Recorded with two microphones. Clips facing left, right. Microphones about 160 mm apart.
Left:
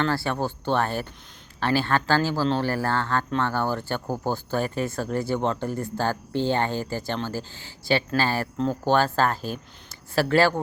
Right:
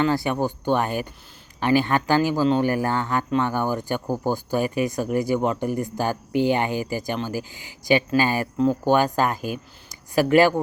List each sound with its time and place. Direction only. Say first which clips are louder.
0.0 s speech: right 3 dB; 15° right (ahead or behind)